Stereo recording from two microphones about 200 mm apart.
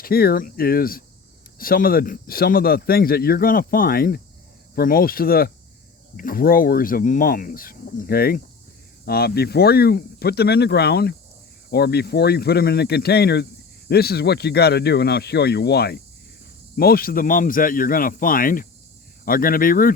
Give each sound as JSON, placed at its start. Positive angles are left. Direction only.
{"t": 0.0, "sound": "speech", "side_deg": 50}